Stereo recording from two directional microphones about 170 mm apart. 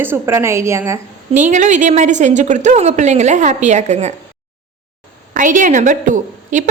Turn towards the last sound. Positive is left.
turn(degrees=-50)  # may be behind; listen again after turning